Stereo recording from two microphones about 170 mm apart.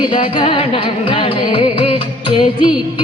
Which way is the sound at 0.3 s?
30° left (ahead or behind).